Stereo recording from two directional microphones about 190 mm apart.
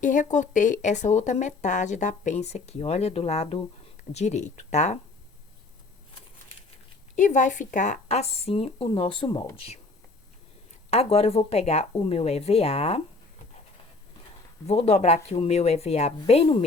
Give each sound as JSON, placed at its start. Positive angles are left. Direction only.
{"t": 0.0, "sound": "speech", "side_deg": 40}
{"t": 7.2, "sound": "speech", "side_deg": 40}
{"t": 10.9, "sound": "speech", "side_deg": 30}
{"t": 14.7, "sound": "speech", "side_deg": 35}